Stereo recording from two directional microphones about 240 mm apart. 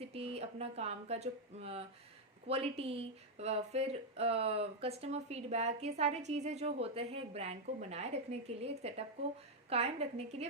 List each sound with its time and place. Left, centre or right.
0.0 s speech: right